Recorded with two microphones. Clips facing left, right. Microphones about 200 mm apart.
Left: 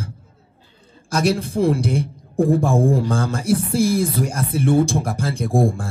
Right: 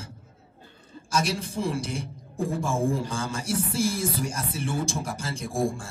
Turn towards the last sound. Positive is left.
turn(degrees=60)  # may be behind; listen again after turning